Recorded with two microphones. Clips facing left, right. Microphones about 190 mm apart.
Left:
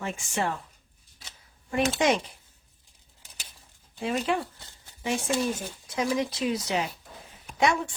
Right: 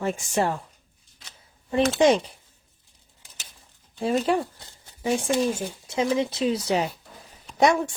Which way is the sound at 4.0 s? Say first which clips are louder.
Right 5 dB; 35° right (ahead or behind).